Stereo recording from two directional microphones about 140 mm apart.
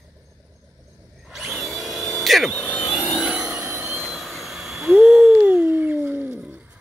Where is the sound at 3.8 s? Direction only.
Centre (ahead or behind).